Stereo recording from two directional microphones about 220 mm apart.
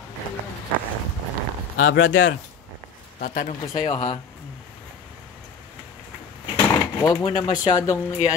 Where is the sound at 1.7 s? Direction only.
65° left (ahead or behind).